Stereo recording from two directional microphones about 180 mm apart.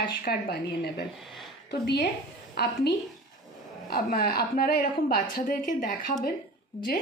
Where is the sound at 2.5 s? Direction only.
65° left (ahead or behind); by 6.2 s 50° left (ahead or behind).